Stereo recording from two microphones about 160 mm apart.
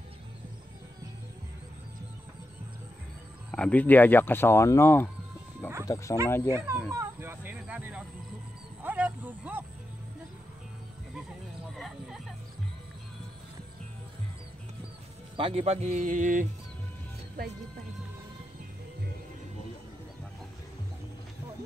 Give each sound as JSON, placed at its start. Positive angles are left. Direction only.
{"t": 3.5, "sound": "speech", "side_deg": 10}
{"t": 5.6, "sound": "music", "side_deg": 10}
{"t": 6.2, "sound": "speech", "side_deg": 15}
{"t": 6.5, "sound": "speech", "side_deg": -10}
{"t": 6.9, "sound": "a sound", "side_deg": -15}
{"t": 8.8, "sound": "speech", "side_deg": -10}
{"t": 11.7, "sound": "a sound", "side_deg": 0}
{"t": 15.3, "sound": "speech", "side_deg": -35}